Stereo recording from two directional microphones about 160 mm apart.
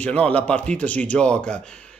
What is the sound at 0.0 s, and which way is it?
A man's voice, 10° left (ahead or behind).